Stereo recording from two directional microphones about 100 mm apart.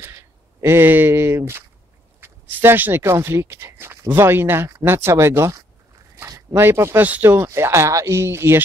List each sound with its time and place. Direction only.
0.0 s speech: 25° right (ahead or behind)
6.1 s a sound: 30° right (ahead or behind)
7.1 s speech: 20° right (ahead or behind)